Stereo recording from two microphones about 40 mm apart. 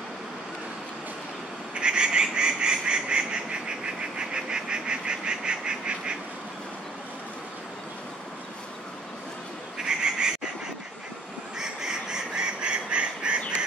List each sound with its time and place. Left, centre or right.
1.8 s frog: right
9.8 s frog: centre
11.5 s duck: centre